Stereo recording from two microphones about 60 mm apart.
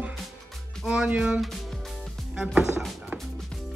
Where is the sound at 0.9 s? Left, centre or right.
Centre.